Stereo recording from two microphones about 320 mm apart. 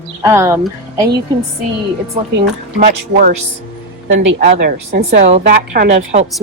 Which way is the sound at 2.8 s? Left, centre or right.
Right.